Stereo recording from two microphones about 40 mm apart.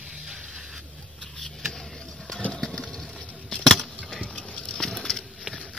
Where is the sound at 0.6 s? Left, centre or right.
Centre.